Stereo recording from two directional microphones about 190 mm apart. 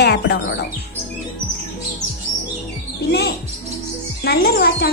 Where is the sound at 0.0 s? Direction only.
60° left (ahead or behind).